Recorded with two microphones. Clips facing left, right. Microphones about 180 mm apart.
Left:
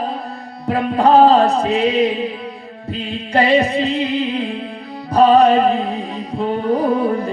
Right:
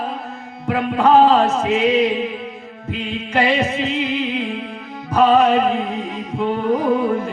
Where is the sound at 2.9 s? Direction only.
35° left (ahead or behind).